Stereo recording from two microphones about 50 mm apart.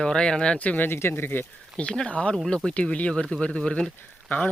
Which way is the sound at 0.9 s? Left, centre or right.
Left.